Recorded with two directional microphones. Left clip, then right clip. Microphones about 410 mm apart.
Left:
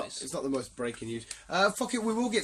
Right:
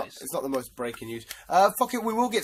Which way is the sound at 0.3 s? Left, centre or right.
Centre.